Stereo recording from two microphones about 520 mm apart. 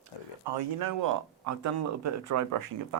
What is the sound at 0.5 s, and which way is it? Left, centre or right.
Speech, right.